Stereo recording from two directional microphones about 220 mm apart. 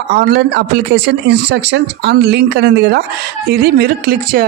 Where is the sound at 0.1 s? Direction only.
50° right (ahead or behind).